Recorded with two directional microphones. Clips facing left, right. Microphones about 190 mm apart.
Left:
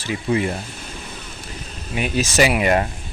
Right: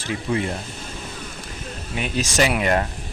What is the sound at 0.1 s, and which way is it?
Speech, 5° left (ahead or behind).